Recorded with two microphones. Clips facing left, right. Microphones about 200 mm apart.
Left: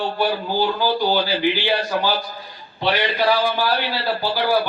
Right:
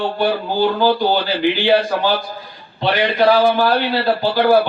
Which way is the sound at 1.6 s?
55° right (ahead or behind).